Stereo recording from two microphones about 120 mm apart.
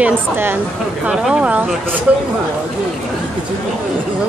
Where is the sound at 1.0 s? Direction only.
5° right (ahead or behind).